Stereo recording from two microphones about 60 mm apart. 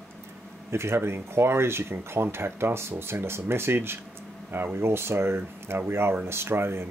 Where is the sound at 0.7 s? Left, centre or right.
Right.